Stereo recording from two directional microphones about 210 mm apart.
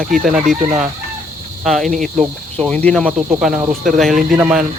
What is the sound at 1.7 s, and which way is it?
Cricket, centre (ahead or behind).